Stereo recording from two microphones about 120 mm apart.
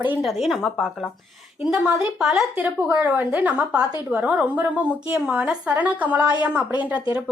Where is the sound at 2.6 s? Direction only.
15° right (ahead or behind).